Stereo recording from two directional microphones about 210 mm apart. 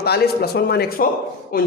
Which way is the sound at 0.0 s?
50° left (ahead or behind).